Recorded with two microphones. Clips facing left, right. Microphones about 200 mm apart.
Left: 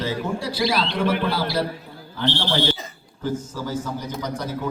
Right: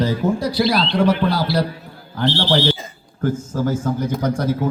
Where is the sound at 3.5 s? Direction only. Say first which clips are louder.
Right 7 dB; 50° right (ahead or behind).